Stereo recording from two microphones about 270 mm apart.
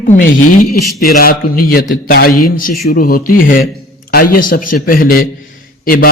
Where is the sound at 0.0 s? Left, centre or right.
Left.